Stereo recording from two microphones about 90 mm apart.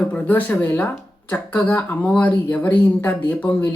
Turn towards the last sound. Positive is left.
turn(degrees=20)  # may be behind; listen again after turning